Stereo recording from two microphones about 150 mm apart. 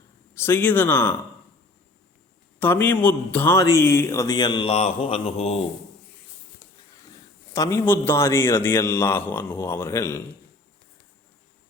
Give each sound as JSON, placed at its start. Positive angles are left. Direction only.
{"t": 0.3, "sound": "a man's voice", "side_deg": 15}
{"t": 2.6, "sound": "a man's voice", "side_deg": 15}
{"t": 7.5, "sound": "a man's voice", "side_deg": 20}